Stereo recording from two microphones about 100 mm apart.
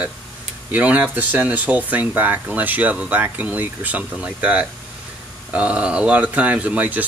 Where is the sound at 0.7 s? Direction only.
15° right (ahead or behind).